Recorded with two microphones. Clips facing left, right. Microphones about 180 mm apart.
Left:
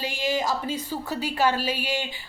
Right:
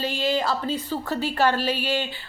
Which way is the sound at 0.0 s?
15° left (ahead or behind).